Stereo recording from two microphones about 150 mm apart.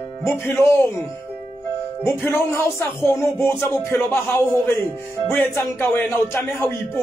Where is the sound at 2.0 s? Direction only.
15° left (ahead or behind).